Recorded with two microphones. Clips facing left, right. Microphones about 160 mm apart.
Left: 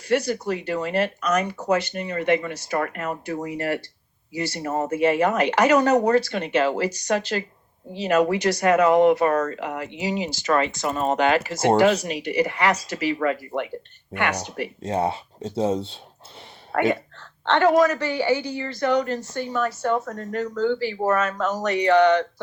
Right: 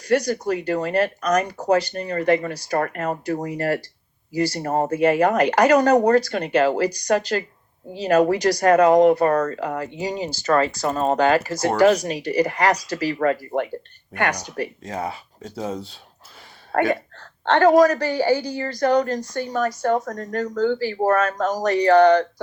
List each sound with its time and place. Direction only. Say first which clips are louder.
0.0 s speech: right 2 dB; 40° right (ahead or behind)
14.3 s speech: right 1 dB; 25° left (ahead or behind)
17.2 s speech: right 3 dB; 40° right (ahead or behind)